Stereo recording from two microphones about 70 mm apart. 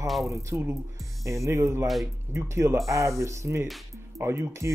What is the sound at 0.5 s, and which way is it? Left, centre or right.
Speech, right.